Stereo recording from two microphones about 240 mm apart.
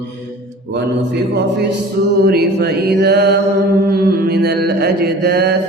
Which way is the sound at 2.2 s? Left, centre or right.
Right.